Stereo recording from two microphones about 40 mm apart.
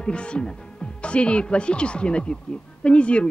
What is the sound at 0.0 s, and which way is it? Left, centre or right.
Speech, left.